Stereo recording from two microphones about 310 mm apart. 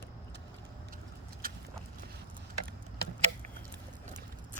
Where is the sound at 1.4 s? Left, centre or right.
Right.